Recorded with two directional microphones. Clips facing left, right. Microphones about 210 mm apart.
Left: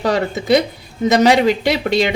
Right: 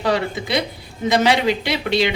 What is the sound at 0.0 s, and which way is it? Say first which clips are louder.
Speech: left 3 dB; 45° left (ahead or behind).